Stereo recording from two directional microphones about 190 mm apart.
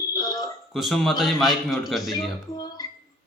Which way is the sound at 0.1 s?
20° left (ahead or behind).